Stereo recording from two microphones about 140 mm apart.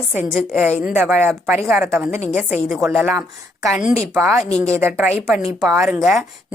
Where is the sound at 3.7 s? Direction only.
5° right (ahead or behind).